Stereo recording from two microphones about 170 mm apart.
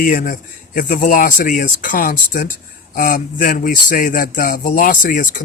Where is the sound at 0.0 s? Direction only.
55° left (ahead or behind).